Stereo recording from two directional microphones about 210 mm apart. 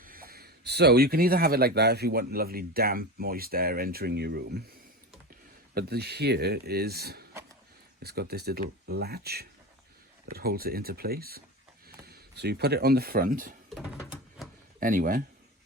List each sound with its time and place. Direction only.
0.0 s speech: 45° right (ahead or behind)
5.7 s speech: 50° right (ahead or behind)
14.8 s speech: 40° right (ahead or behind)